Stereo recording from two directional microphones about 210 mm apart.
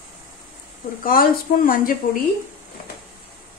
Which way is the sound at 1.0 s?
40° left (ahead or behind).